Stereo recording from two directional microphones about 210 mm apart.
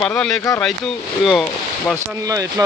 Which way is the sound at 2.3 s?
15° right (ahead or behind).